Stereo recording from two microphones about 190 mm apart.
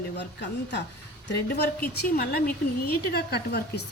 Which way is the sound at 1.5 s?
55° left (ahead or behind).